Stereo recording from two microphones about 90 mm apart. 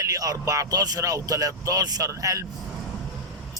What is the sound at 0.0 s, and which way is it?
Speech, 40° right (ahead or behind).